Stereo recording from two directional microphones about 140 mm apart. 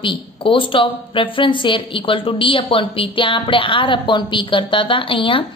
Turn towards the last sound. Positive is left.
turn(degrees=40)  # may be behind; listen again after turning